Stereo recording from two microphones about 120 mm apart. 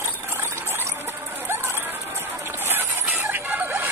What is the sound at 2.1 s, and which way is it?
Music, 20° right (ahead or behind).